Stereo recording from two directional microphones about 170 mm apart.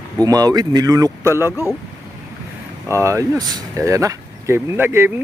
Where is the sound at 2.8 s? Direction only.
15° right (ahead or behind).